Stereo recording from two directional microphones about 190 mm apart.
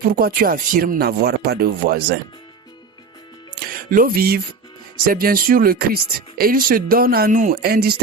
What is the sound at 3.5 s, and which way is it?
Speech, 45° right (ahead or behind).